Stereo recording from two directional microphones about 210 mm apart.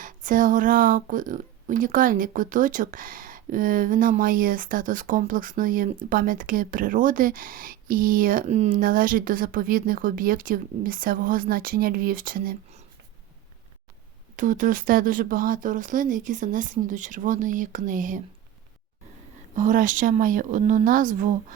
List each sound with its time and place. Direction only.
0.0 s speech: 40° right (ahead or behind)
14.3 s speech: 40° right (ahead or behind)
19.5 s speech: 40° right (ahead or behind)